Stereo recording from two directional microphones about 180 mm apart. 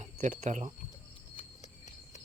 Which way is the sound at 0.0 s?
40° right (ahead or behind).